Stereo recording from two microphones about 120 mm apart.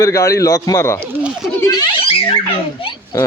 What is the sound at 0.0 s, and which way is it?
A man's voice, 25° left (ahead or behind).